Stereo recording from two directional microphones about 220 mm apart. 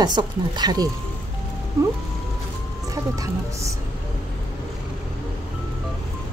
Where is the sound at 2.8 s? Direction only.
15° right (ahead or behind).